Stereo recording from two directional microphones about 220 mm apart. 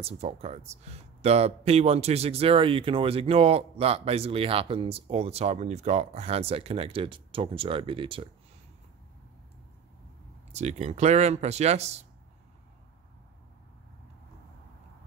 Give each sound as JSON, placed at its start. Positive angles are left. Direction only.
{"t": 0.0, "sound": "speech", "side_deg": -30}
{"t": 10.5, "sound": "speech", "side_deg": -30}